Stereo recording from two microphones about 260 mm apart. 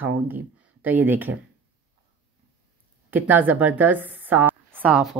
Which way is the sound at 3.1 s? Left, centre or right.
Centre.